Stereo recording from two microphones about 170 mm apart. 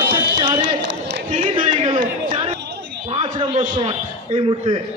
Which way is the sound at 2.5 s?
80° right.